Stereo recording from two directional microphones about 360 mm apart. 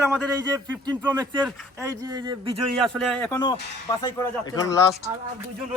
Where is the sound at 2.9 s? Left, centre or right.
Centre.